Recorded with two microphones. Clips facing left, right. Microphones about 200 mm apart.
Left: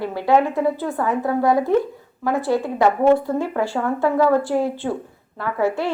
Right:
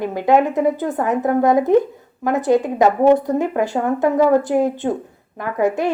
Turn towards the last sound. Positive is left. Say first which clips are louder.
# right 3 dB
turn(degrees=-15)  # may be behind; listen again after turning